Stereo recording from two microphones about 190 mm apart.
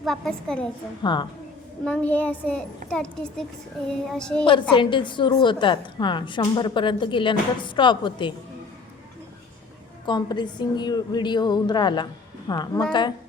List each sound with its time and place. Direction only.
0.0 s a child's voice: 5° left (ahead or behind)
1.0 s a woman's voice: 25° left (ahead or behind)
1.8 s a child's voice: 10° left (ahead or behind)
4.7 s a woman's voice: 25° left (ahead or behind)
10.1 s a woman's voice: 25° left (ahead or behind)